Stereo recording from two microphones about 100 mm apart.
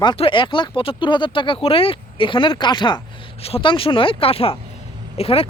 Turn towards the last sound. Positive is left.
turn(degrees=80)